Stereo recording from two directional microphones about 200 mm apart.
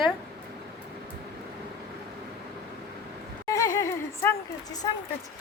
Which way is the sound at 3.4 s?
15° left (ahead or behind).